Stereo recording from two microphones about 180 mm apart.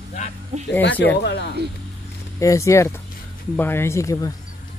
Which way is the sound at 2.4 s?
15° left (ahead or behind).